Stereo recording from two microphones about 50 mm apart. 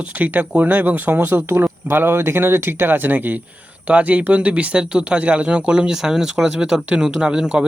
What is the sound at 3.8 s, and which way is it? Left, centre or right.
Speech, right.